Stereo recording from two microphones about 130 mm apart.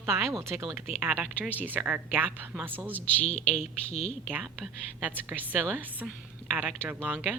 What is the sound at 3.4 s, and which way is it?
Speech, 55° left (ahead or behind).